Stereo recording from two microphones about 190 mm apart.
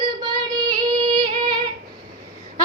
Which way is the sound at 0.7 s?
25° right (ahead or behind).